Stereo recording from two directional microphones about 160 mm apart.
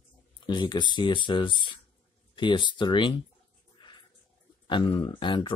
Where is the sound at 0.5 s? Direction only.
30° left (ahead or behind).